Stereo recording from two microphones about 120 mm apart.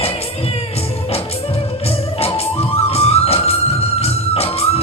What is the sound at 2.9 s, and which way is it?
Music, 55° left (ahead or behind).